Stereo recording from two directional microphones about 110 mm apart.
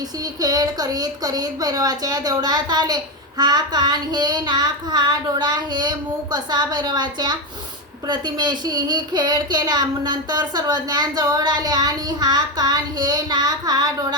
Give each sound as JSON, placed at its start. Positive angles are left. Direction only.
{"t": 0.3, "sound": "speech", "side_deg": -35}